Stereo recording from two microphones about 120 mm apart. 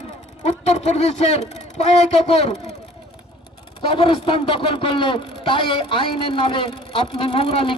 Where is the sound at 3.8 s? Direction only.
50° left (ahead or behind).